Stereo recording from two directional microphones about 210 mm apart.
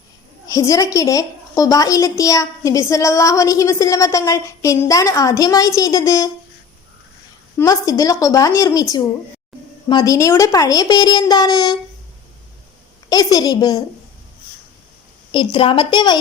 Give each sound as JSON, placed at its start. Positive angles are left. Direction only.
{"t": 0.4, "sound": "a woman's voice", "side_deg": 15}
{"t": 7.6, "sound": "a woman's voice", "side_deg": 15}
{"t": 13.1, "sound": "a woman's voice", "side_deg": 20}
{"t": 15.3, "sound": "a woman's voice", "side_deg": 25}